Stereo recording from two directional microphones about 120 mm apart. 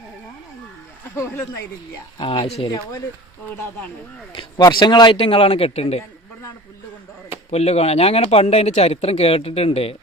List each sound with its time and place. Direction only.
1.1 s speech: 25° left (ahead or behind)
2.1 s speech: 45° left (ahead or behind)
2.4 s speech: 60° left (ahead or behind)
2.6 s speech: 35° left (ahead or behind)
4.4 s speech: 35° left (ahead or behind)
5.1 s speech: 50° left (ahead or behind)
7.5 s speech: 60° left (ahead or behind)